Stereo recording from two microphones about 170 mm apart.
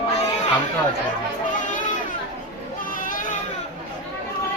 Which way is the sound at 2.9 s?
55° left (ahead or behind).